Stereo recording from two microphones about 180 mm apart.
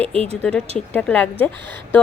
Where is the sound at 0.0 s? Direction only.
35° right (ahead or behind).